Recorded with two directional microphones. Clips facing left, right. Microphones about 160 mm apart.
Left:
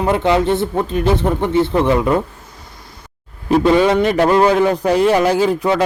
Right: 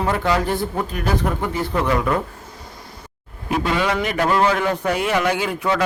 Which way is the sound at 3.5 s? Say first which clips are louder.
Left 9 dB; 30° left (ahead or behind).